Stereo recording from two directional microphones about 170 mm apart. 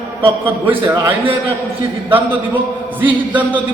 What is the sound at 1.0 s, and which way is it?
Speech, 30° right (ahead or behind).